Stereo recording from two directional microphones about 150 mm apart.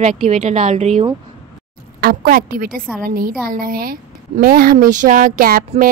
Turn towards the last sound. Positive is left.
turn(degrees=-70)  # may be behind; listen again after turning